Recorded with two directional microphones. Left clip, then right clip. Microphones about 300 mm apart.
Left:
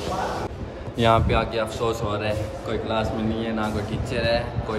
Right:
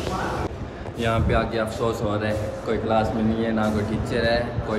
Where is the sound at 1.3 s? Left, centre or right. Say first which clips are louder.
Even; centre.